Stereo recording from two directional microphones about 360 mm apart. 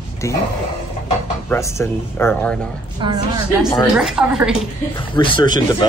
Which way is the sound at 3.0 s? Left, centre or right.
Centre.